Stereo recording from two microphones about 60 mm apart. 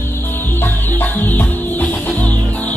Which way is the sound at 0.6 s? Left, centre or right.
Left.